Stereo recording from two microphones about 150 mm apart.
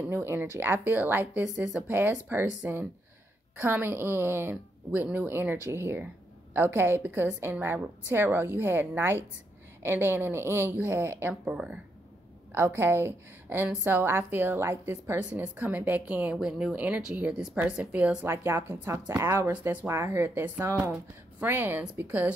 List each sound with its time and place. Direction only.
0.0 s a woman's voice: 15° right (ahead or behind)